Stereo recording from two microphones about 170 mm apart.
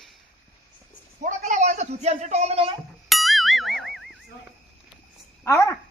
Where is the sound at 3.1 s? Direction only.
Centre (ahead or behind).